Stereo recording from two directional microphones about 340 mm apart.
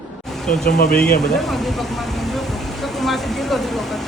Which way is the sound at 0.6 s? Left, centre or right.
Left.